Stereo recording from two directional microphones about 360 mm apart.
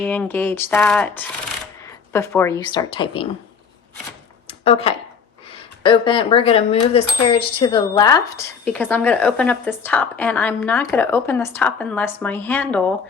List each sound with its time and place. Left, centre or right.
0.0 s speech: centre
4.4 s a sound: centre
5.5 s speech: centre